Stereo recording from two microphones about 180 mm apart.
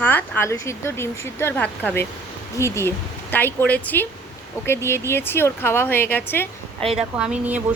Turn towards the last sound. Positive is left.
turn(degrees=-5)  # may be behind; listen again after turning